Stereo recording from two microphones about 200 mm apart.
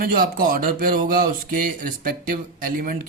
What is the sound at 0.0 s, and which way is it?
Speech, 45° right (ahead or behind).